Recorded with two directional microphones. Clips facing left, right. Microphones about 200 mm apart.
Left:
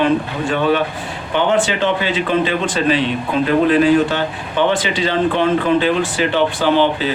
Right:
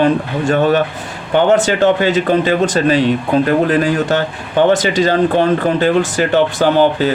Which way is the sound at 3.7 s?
45° right (ahead or behind).